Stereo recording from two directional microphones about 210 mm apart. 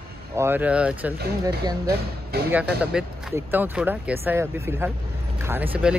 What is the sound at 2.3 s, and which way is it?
Speech, 50° right (ahead or behind).